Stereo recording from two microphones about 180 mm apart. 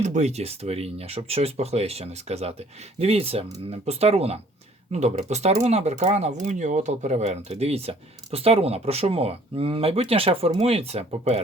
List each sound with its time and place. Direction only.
0.0 s speech: 40° right (ahead or behind)